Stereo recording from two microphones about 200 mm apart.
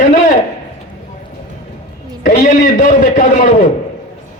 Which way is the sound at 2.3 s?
40° left (ahead or behind).